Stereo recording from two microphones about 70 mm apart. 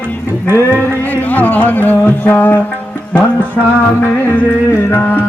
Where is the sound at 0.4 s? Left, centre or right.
Right.